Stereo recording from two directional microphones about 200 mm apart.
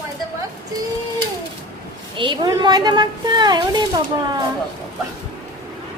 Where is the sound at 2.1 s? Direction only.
25° right (ahead or behind).